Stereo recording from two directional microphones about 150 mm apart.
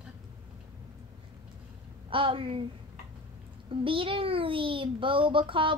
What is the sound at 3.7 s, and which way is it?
A child's voice, 35° right (ahead or behind).